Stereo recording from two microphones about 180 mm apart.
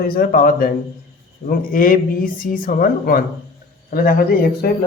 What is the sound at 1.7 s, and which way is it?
A man's voice, 50° left (ahead or behind).